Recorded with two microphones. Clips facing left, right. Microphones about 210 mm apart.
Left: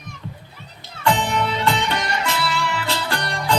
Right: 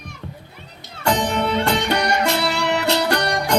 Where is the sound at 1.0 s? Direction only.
40° right (ahead or behind).